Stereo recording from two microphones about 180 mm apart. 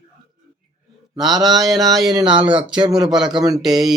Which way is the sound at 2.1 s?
25° right (ahead or behind).